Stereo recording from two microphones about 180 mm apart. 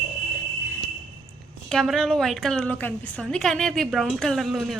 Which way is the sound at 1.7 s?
Centre (ahead or behind).